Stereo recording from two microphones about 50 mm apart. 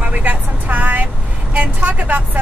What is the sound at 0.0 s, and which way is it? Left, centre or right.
Vehicle, right.